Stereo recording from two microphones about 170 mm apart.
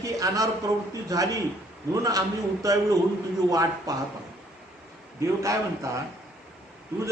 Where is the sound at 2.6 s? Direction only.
20° right (ahead or behind).